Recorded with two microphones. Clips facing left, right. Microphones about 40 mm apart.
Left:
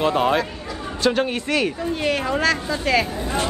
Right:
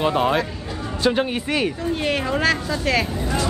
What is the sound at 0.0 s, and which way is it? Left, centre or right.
A woman's voice, centre.